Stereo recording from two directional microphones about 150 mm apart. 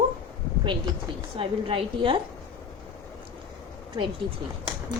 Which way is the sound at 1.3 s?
35° right (ahead or behind).